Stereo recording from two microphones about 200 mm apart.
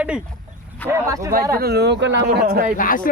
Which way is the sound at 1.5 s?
50° right (ahead or behind).